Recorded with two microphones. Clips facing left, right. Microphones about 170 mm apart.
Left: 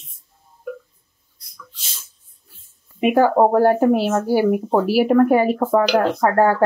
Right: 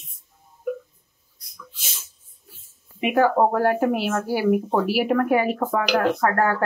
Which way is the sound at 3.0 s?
35° left (ahead or behind).